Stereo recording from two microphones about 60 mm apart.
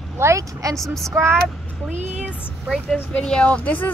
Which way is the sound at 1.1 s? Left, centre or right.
Right.